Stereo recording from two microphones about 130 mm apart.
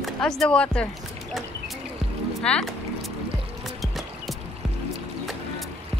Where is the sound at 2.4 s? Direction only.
5° left (ahead or behind).